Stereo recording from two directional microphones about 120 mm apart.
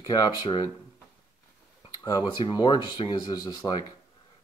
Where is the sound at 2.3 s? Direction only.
40° left (ahead or behind).